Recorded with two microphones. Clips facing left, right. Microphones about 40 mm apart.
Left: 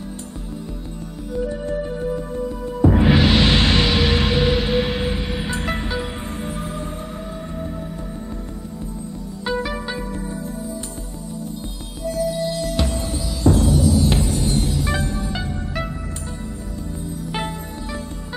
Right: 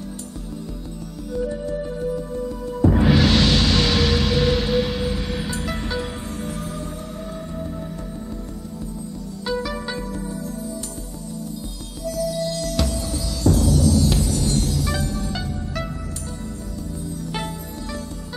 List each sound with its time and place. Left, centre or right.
1.6 s music: left
9.4 s music: left
12.0 s music: left